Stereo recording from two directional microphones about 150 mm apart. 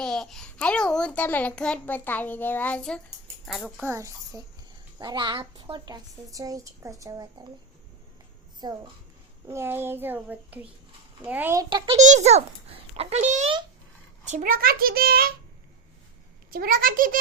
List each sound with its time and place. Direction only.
0.0 s a child's voice: 5° left (ahead or behind)
3.8 s a woman's voice: 20° right (ahead or behind)
8.6 s a woman's voice: 30° right (ahead or behind)
9.5 s a child's voice: 15° right (ahead or behind)
11.9 s a child's voice: 50° right (ahead or behind); by 15.3 s 85° right
16.5 s a child's voice: 70° right (ahead or behind)